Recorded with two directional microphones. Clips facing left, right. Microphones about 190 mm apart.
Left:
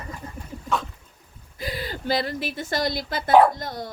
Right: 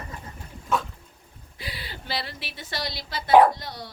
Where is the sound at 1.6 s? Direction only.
45° left (ahead or behind).